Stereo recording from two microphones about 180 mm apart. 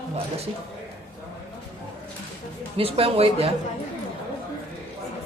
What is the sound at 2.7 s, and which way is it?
Speech, 30° right (ahead or behind).